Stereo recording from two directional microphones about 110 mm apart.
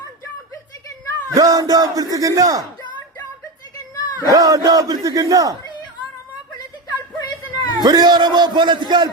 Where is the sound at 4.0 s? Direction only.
30° left (ahead or behind).